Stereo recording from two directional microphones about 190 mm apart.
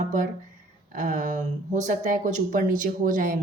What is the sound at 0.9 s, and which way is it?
A woman's voice, 40° right (ahead or behind).